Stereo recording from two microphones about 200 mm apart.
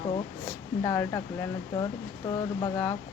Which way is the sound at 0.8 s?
15° left (ahead or behind).